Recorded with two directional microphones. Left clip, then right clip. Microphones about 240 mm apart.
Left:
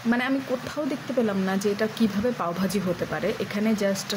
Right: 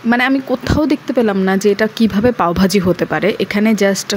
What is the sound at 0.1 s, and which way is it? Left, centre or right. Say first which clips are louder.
Speech: right 11 dB; right.